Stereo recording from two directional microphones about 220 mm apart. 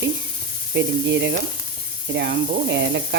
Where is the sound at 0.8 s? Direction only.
50° right (ahead or behind).